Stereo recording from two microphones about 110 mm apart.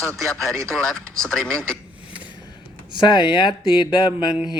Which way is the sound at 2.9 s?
45° left (ahead or behind).